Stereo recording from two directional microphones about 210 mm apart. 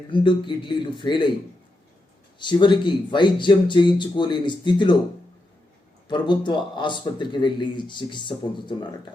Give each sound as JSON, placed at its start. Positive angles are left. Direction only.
{"t": 0.1, "sound": "speech", "side_deg": 20}
{"t": 2.4, "sound": "speech", "side_deg": 20}
{"t": 6.1, "sound": "speech", "side_deg": 20}